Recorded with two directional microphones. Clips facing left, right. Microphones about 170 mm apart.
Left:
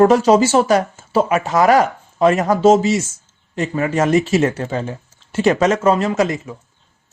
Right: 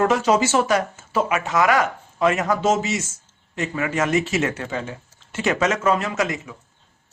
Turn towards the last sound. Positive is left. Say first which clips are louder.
# left 6 dB
turn(degrees=35)  # may be behind; listen again after turning